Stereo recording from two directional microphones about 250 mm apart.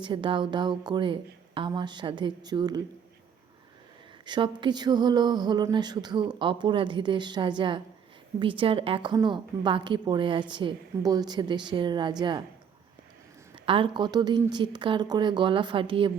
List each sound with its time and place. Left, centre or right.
0.0 s a woman's voice: centre
4.3 s a woman's voice: centre
13.7 s a woman's voice: centre